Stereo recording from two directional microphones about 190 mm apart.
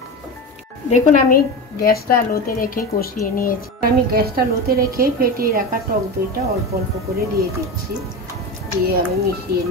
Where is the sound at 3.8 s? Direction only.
50° right (ahead or behind).